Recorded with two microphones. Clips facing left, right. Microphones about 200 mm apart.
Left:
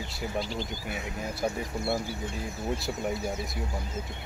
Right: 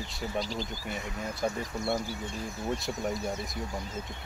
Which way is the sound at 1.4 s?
5° left (ahead or behind).